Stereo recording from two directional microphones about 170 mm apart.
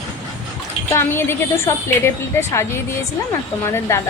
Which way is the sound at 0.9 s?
15° left (ahead or behind).